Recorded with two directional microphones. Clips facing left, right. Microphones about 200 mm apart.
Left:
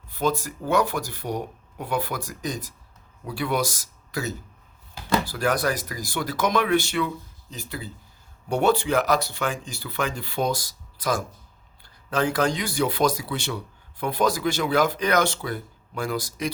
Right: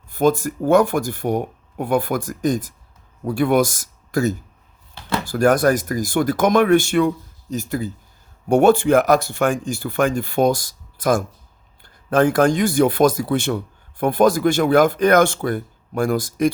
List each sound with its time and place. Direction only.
0.1 s speech: 50° right (ahead or behind)